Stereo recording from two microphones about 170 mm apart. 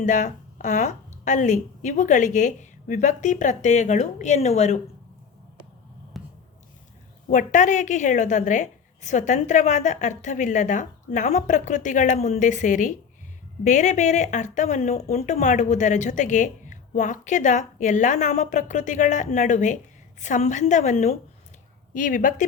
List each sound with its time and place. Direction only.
0.0 s speech: 45° left (ahead or behind)
6.1 s a sound: centre (ahead or behind)
7.3 s speech: 45° left (ahead or behind)